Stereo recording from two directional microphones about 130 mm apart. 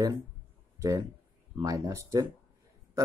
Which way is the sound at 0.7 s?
20° right (ahead or behind).